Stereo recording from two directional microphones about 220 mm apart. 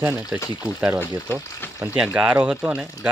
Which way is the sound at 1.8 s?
5° right (ahead or behind).